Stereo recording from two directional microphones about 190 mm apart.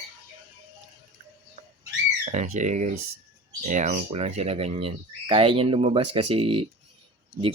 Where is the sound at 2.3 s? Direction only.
40° right (ahead or behind).